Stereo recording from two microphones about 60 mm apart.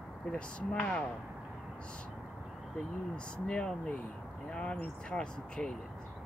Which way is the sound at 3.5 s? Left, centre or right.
Centre.